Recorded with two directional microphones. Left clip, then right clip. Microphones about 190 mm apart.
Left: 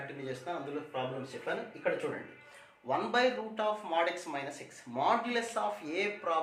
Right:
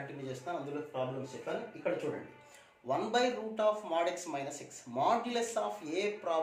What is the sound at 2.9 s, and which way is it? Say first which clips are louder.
Speech: left 2 dB; 20° right (ahead or behind).